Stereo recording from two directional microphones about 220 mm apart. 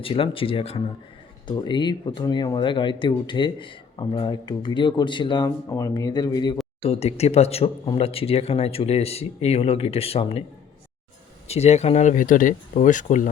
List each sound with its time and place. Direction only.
0.0 s speech: 25° left (ahead or behind)
11.4 s speech: 30° left (ahead or behind)